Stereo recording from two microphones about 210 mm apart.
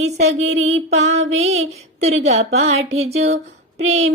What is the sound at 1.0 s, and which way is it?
Speech, 30° right (ahead or behind).